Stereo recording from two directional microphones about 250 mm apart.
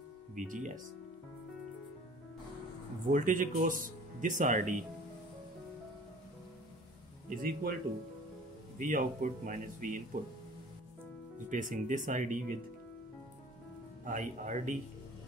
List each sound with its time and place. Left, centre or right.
0.4 s speech: right
3.1 s speech: right
7.2 s speech: right
8.7 s speech: right
11.5 s speech: right
14.0 s speech: right